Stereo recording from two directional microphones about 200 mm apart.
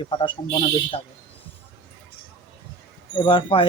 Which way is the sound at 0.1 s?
25° left (ahead or behind).